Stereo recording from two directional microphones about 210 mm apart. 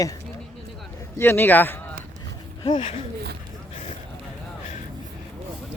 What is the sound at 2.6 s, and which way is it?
Speech, 25° left (ahead or behind).